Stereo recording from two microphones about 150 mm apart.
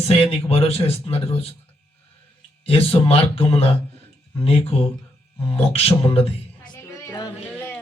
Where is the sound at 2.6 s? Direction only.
40° left (ahead or behind).